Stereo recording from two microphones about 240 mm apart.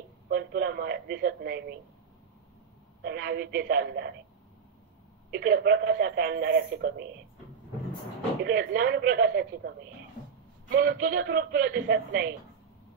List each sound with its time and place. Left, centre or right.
0.3 s a sound: right
3.0 s speech: right
5.3 s speech: right
8.5 s speech: right
10.8 s speech: right